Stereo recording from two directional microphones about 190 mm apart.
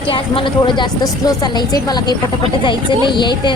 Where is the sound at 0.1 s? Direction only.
25° left (ahead or behind).